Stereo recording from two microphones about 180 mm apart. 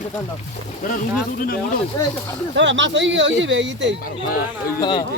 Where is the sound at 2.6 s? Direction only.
90° right.